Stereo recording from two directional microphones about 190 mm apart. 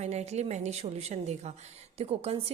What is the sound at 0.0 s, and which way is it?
A woman's voice, 35° right (ahead or behind).